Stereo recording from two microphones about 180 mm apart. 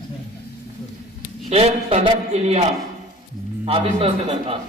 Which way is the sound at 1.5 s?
35° right (ahead or behind).